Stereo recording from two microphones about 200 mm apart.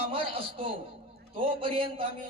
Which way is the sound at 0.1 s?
25° right (ahead or behind).